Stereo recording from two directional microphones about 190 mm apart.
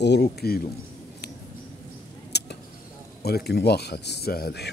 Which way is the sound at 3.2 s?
55° left (ahead or behind).